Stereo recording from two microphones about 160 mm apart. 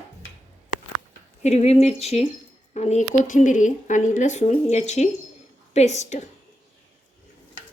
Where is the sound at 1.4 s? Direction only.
45° left (ahead or behind).